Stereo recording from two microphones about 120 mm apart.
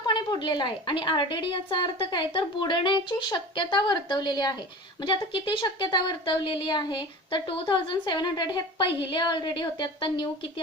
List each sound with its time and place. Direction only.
0.0 s speech: 40° left (ahead or behind)